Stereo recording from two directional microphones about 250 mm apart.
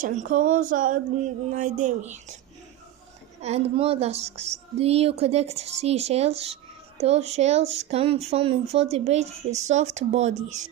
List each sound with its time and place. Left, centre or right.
0.0 s speech: right
3.4 s speech: right